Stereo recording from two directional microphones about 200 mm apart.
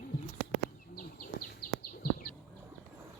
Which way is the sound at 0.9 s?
45° left (ahead or behind).